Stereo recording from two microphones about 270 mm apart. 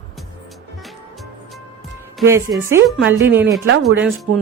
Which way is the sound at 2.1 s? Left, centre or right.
Centre.